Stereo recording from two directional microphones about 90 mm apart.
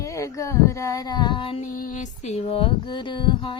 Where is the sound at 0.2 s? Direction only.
35° left (ahead or behind); by 1.5 s 65° left (ahead or behind).